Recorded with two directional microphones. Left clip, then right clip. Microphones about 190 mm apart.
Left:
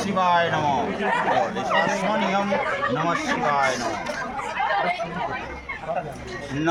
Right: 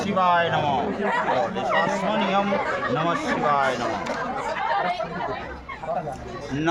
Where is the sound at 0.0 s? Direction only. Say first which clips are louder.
Even; 10° left (ahead or behind).